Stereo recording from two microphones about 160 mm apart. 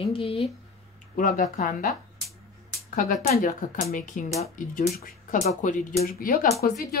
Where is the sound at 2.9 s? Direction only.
60° left (ahead or behind).